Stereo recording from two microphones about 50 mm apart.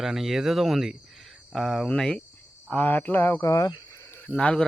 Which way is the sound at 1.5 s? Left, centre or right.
Centre.